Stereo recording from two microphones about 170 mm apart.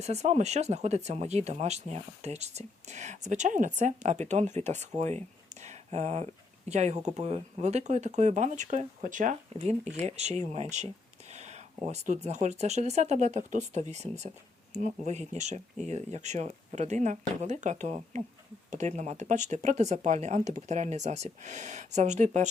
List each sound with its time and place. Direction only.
0.0 s speech: 40° right (ahead or behind)
11.3 s a sound: 40° right (ahead or behind)
11.9 s speech: 45° right (ahead or behind)